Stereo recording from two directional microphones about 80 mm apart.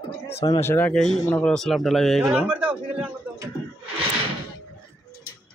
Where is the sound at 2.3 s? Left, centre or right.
Centre.